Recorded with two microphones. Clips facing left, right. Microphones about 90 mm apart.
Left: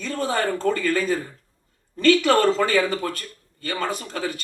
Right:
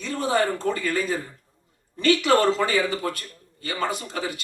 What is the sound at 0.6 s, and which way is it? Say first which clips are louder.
A man's voice: left 3 dB; 15° right (ahead or behind).